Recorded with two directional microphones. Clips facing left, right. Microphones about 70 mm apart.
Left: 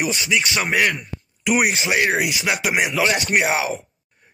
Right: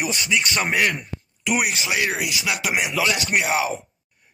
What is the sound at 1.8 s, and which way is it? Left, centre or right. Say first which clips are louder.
Speech: left 4 dB; left.